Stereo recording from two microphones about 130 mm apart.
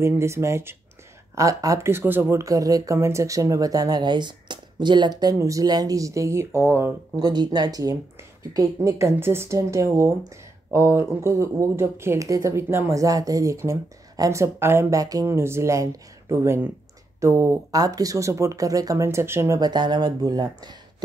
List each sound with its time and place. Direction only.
0.0 s speech: 20° right (ahead or behind)
7.2 s speech: 30° right (ahead or behind)